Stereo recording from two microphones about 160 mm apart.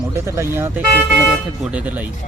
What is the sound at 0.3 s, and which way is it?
Speech, 15° right (ahead or behind).